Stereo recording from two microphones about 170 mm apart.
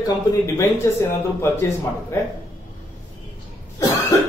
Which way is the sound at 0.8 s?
15° left (ahead or behind).